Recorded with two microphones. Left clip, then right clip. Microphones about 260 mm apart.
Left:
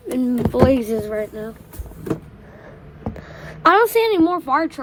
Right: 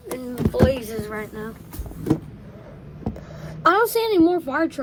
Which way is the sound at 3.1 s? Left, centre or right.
Left.